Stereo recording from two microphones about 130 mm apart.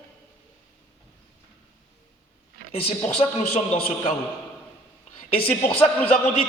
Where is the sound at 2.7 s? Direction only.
50° left (ahead or behind).